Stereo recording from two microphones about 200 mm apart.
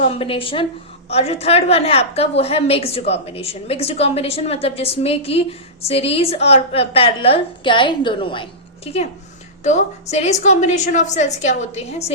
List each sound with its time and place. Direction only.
0.0 s a woman's voice: 25° left (ahead or behind)